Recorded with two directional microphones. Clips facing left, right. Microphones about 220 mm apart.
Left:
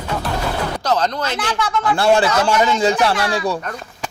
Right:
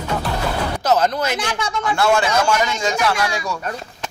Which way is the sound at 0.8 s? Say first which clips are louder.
Right 3 dB; 5° right (ahead or behind).